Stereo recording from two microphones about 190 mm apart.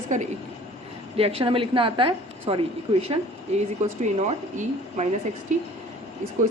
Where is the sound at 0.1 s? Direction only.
40° right (ahead or behind).